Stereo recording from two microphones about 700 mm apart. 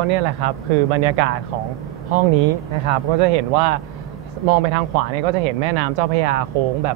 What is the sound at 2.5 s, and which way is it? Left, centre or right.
Speech, right.